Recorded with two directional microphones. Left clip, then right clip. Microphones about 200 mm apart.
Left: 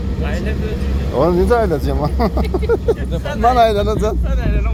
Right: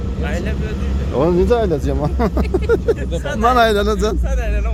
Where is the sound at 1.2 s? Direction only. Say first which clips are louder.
Left 1 dB; 15° right (ahead or behind).